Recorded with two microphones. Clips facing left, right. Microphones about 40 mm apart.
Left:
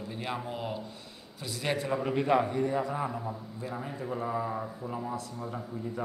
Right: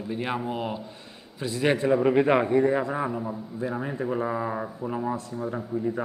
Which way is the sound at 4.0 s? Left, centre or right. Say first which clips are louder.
Right 4 dB; right.